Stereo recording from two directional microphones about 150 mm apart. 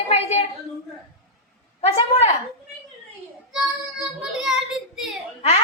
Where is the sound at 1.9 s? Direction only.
40° left (ahead or behind).